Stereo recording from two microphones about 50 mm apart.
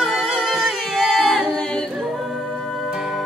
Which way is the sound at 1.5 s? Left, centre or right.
Left.